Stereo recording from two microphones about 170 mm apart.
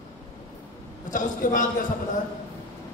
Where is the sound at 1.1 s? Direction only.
50° left (ahead or behind).